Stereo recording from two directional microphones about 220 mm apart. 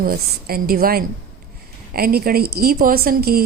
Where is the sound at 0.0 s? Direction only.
40° right (ahead or behind).